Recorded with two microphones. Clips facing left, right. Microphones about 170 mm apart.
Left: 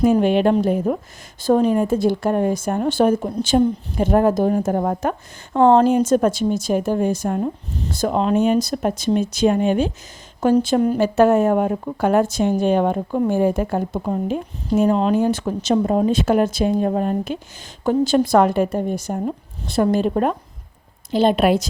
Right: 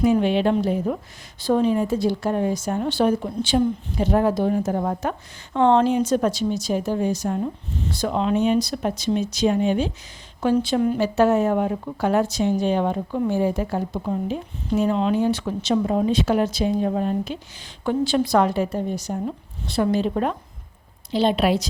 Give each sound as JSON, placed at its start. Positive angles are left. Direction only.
{"t": 0.0, "sound": "speech", "side_deg": 45}
{"t": 5.5, "sound": "speech", "side_deg": 40}